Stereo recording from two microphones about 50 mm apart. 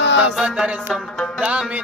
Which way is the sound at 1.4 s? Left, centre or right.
Right.